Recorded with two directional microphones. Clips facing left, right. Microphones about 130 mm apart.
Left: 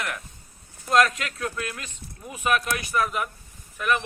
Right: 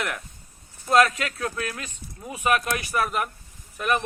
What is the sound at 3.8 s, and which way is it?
Speech, 40° right (ahead or behind).